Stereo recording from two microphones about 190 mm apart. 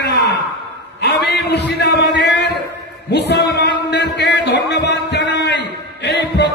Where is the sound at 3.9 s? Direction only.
60° left (ahead or behind).